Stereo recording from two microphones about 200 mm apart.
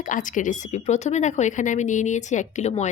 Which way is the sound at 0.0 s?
40° left (ahead or behind).